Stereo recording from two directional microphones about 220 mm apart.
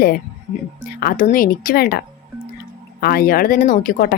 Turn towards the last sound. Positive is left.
turn(degrees=40)  # may be behind; listen again after turning